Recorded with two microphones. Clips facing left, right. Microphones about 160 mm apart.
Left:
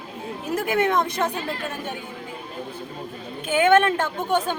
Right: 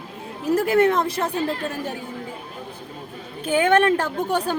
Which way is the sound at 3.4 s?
35° right (ahead or behind).